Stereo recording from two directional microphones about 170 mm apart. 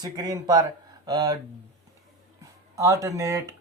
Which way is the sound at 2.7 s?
20° right (ahead or behind).